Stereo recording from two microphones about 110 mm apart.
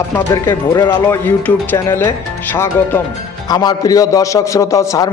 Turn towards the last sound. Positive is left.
turn(degrees=30)  # may be behind; listen again after turning